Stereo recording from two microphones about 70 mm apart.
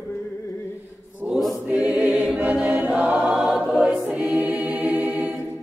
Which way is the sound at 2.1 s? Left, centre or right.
Centre.